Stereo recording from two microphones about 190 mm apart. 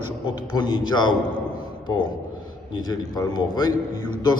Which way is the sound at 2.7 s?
20° left (ahead or behind).